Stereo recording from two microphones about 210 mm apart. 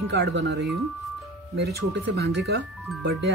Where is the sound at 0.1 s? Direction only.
55° right (ahead or behind).